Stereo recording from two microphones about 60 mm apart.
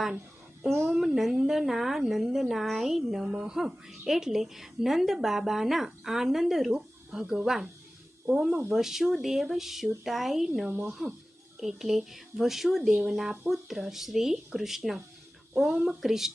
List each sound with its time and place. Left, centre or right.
0.6 s a woman's voice: centre
8.7 s a woman's voice: centre
10.7 s speech: right
11.6 s a woman's voice: centre